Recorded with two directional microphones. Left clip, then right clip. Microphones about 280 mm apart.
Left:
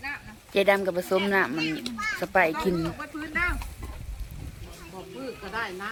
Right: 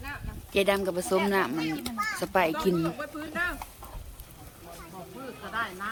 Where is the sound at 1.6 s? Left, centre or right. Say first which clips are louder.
Left 1 dB; right.